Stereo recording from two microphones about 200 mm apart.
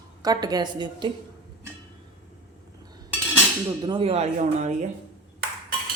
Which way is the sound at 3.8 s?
25° right (ahead or behind).